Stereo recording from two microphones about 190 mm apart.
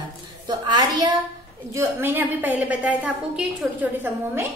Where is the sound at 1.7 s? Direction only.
10° right (ahead or behind).